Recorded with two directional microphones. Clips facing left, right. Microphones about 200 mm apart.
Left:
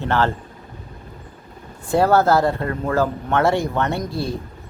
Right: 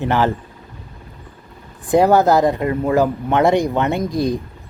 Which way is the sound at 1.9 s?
15° right (ahead or behind).